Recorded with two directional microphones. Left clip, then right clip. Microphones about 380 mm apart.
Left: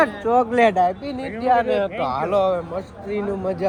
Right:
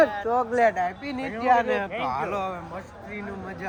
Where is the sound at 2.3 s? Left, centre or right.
Centre.